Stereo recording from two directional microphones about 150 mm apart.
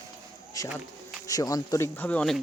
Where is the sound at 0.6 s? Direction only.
25° left (ahead or behind).